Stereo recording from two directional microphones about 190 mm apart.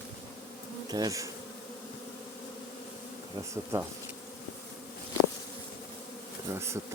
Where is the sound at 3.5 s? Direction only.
15° right (ahead or behind).